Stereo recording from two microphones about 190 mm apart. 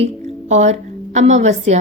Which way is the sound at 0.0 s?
35° right (ahead or behind).